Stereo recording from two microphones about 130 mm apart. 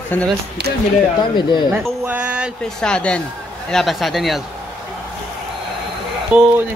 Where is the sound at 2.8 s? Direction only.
5° left (ahead or behind).